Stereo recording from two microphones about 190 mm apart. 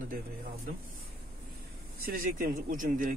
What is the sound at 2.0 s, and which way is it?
Speech, 50° right (ahead or behind).